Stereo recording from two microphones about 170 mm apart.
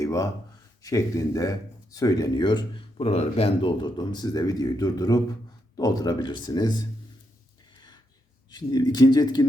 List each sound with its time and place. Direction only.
0.0 s a sound: 20° left (ahead or behind)
0.8 s speech: 20° left (ahead or behind)
8.4 s speech: 25° left (ahead or behind)